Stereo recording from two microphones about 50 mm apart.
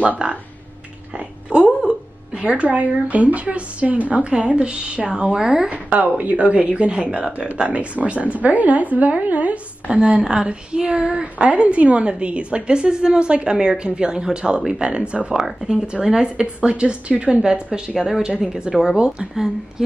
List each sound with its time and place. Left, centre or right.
1.1 s a sound: right
2.4 s speech: right; by 5.7 s centre
5.7 s speech: right